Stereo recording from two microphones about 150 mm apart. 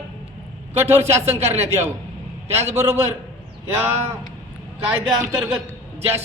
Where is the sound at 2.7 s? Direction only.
15° right (ahead or behind).